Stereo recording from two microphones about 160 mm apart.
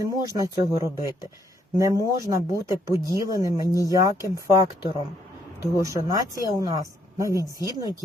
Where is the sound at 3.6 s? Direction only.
20° left (ahead or behind).